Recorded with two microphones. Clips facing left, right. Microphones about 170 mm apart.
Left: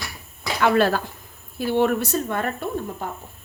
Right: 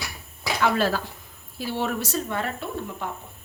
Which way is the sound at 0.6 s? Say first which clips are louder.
Left 5 dB; 60° left (ahead or behind).